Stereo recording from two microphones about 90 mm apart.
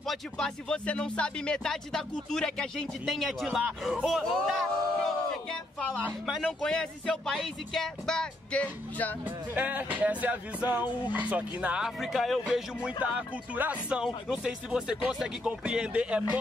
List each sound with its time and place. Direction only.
0.0 s speech: 5° left (ahead or behind)
6.4 s speech: 10° left (ahead or behind)
9.5 s speech: 20° right (ahead or behind)
12.0 s speech: centre (ahead or behind)
13.0 s speech: 15° right (ahead or behind)